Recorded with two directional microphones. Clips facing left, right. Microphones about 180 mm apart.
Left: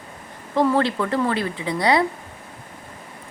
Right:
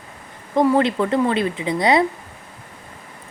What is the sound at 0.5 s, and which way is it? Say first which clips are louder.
A woman's voice: right 3 dB; 15° right (ahead or behind).